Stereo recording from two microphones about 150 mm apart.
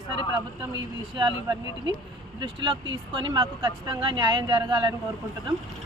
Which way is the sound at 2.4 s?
35° right (ahead or behind).